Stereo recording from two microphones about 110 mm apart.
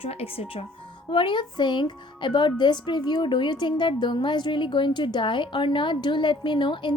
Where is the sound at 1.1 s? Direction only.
45° left (ahead or behind).